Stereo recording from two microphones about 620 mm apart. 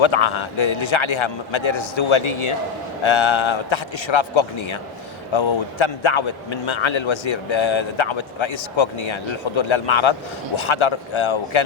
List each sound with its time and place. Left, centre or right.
0.0 s a man's voice: left